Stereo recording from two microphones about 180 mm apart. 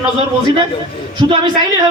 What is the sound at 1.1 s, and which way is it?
Speech, 25° right (ahead or behind).